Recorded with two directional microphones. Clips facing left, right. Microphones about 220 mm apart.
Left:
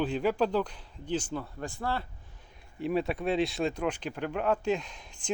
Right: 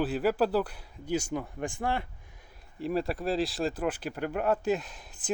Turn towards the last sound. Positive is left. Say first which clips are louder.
# right 1 dB
turn(degrees=-5)  # may be behind; listen again after turning